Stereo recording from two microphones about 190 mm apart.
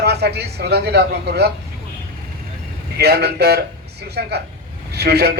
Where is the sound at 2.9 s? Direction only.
60° right (ahead or behind).